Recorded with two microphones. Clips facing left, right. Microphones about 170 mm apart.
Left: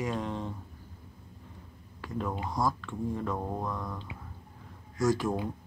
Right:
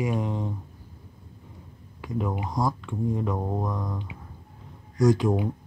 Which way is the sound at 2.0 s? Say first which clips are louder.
Right 4 dB; 15° right (ahead or behind).